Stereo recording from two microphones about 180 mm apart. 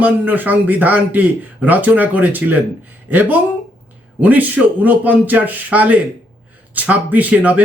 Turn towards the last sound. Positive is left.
turn(degrees=-10)  # may be behind; listen again after turning